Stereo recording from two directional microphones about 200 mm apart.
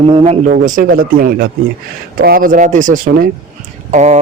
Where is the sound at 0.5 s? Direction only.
40° right (ahead or behind).